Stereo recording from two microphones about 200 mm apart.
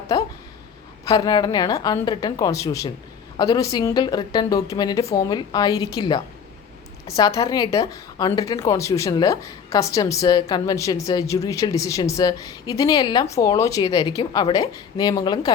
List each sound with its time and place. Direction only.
0.1 s a woman's voice: 20° left (ahead or behind)